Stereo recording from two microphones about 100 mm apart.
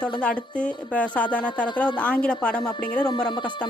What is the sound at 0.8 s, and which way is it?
A woman's voice, 15° left (ahead or behind).